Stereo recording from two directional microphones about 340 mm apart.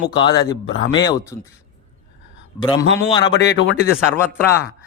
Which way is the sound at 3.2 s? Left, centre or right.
Left.